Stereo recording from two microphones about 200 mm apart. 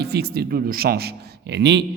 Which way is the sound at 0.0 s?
55° right (ahead or behind).